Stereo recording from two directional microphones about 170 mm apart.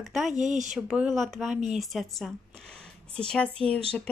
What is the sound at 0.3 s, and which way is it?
Speech, 45° right (ahead or behind).